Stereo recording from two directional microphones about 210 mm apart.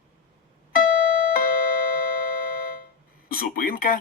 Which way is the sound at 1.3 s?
40° left (ahead or behind).